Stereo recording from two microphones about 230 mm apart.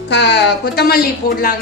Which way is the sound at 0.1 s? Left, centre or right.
Left.